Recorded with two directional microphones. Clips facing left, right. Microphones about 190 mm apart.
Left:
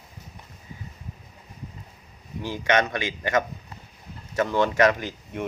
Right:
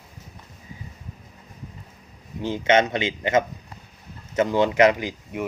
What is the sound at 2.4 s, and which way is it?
A man's voice, 20° right (ahead or behind).